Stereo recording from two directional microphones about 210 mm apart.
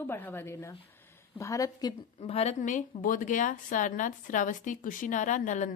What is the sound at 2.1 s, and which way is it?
Speech, 30° left (ahead or behind).